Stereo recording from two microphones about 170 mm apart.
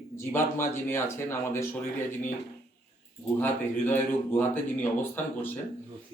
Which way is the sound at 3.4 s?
10° left (ahead or behind).